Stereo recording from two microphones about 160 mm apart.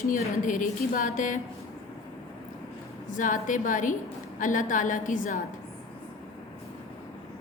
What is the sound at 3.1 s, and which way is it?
A woman's voice, 55° left (ahead or behind).